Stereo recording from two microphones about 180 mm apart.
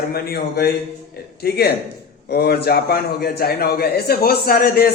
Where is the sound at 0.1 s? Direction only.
60° left (ahead or behind).